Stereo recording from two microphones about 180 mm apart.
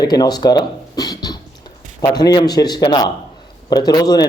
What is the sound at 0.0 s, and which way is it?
A man's voice, 20° left (ahead or behind).